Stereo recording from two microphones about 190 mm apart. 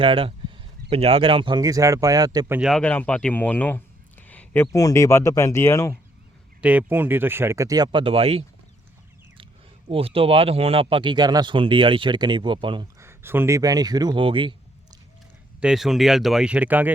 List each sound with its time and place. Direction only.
0.0 s speech: 30° right (ahead or behind)
2.6 s speech: centre (ahead or behind)
6.6 s speech: 5° right (ahead or behind); by 8.4 s 30° right (ahead or behind)
9.9 s speech: 30° right (ahead or behind)
13.0 s speech: 15° right (ahead or behind)
15.6 s speech: centre (ahead or behind)